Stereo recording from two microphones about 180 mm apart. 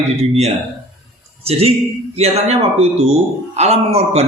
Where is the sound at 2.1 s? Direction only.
35° right (ahead or behind).